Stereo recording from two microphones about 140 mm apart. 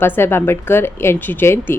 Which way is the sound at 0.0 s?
15° left (ahead or behind).